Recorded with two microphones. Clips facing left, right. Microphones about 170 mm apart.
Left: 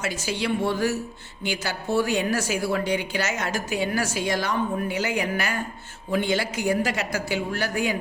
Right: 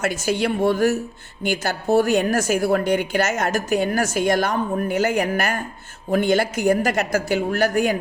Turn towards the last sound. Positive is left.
turn(degrees=-45)  # may be behind; listen again after turning